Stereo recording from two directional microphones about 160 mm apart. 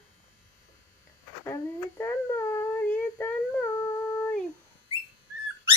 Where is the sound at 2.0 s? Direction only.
15° left (ahead or behind).